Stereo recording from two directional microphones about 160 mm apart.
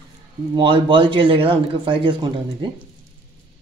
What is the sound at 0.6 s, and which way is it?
Speech, 30° right (ahead or behind).